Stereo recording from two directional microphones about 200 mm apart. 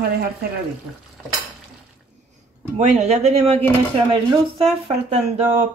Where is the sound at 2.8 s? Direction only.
35° right (ahead or behind).